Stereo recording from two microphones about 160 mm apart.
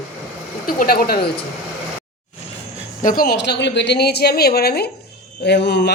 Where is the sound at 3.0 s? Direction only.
65° left (ahead or behind); by 5.8 s 90° left.